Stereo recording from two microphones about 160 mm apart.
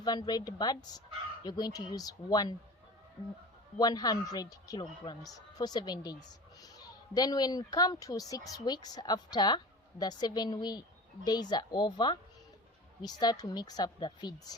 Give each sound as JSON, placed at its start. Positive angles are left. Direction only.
{"t": 0.0, "sound": "a man's voice", "side_deg": 25}
{"t": 3.8, "sound": "a man's voice", "side_deg": 25}